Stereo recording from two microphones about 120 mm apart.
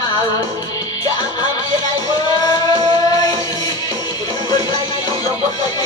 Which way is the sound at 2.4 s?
35° left (ahead or behind).